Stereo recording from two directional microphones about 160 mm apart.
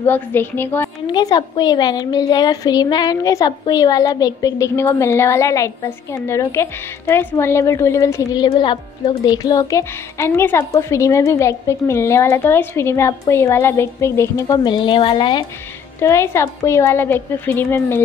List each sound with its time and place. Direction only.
0.0 s a woman's voice: 10° left (ahead or behind)
1.0 s a woman's voice: 25° left (ahead or behind)
16.0 s a woman's voice: 15° left (ahead or behind)